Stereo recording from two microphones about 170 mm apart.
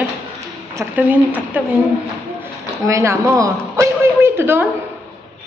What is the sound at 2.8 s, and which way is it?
A woman's voice, 20° right (ahead or behind).